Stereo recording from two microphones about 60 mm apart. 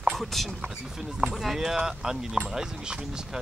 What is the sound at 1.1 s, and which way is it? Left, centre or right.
Speech, centre.